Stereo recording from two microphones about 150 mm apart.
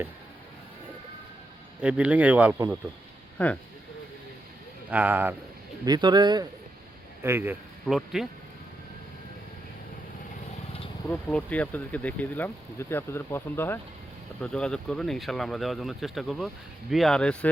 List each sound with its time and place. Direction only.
1.8 s speech: 10° right (ahead or behind)
3.3 s speech: 10° left (ahead or behind)
4.9 s speech: 10° right (ahead or behind)
5.8 s a man's voice: 30° right (ahead or behind)
7.2 s speech: 15° right (ahead or behind)
7.9 s speech: centre (ahead or behind)
11.1 s speech: 10° left (ahead or behind)
14.4 s speech: 5° left (ahead or behind)